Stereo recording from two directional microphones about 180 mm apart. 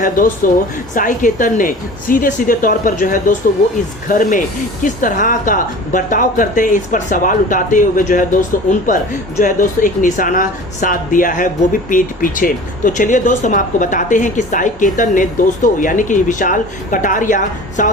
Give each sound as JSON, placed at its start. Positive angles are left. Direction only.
{"t": 0.0, "sound": "speech", "side_deg": 50}